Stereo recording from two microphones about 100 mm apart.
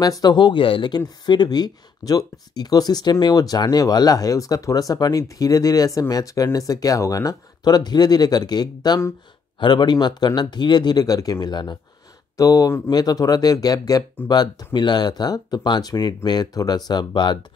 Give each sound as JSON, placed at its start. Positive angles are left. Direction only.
{"t": 0.0, "sound": "speech", "side_deg": 40}
{"t": 12.4, "sound": "speech", "side_deg": 35}
{"t": 12.9, "sound": "speech", "side_deg": 40}